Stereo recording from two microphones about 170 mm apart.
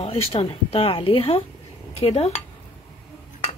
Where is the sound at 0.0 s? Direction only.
35° left (ahead or behind).